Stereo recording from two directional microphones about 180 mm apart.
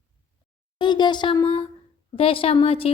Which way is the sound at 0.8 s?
25° left (ahead or behind).